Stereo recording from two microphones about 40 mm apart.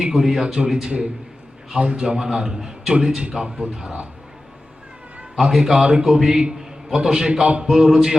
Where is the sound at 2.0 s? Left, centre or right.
Centre.